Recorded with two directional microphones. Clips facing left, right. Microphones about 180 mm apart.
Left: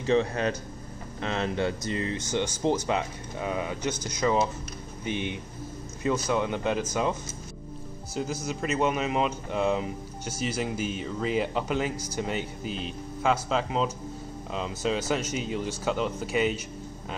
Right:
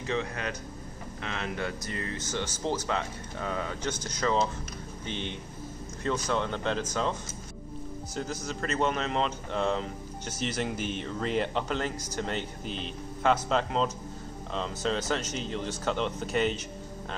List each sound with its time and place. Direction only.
0.0 s speech: 30° left (ahead or behind); by 16.6 s 5° left (ahead or behind)